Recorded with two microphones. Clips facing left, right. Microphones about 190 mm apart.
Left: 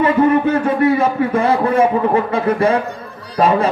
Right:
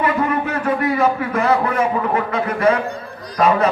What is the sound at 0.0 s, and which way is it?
A man's voice, 30° left (ahead or behind).